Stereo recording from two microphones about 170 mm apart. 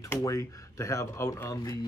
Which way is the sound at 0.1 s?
20° left (ahead or behind).